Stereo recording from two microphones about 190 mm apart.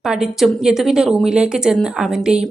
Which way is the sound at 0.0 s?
Centre (ahead or behind).